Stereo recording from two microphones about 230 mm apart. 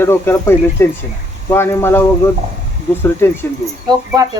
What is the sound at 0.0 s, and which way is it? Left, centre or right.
Speech, centre.